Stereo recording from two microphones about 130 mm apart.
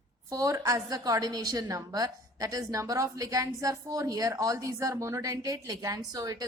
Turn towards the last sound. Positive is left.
turn(degrees=-30)  # may be behind; listen again after turning